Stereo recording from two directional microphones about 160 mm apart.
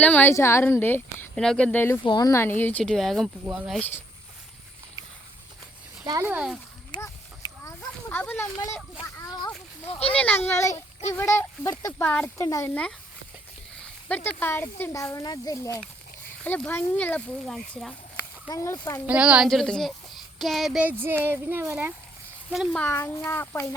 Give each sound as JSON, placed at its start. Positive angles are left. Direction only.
{"t": 0.0, "sound": "speech", "side_deg": 10}
{"t": 2.0, "sound": "speech", "side_deg": 25}
{"t": 6.1, "sound": "speech", "side_deg": -15}
{"t": 6.9, "sound": "clip-clop", "side_deg": 25}
{"t": 7.8, "sound": "a sound", "side_deg": 10}
{"t": 9.8, "sound": "speech", "side_deg": 10}
{"t": 11.9, "sound": "speech", "side_deg": 10}
{"t": 14.1, "sound": "speech", "side_deg": 10}
{"t": 18.4, "sound": "speech", "side_deg": 20}
{"t": 19.0, "sound": "speech", "side_deg": -5}
{"t": 22.7, "sound": "speech", "side_deg": 10}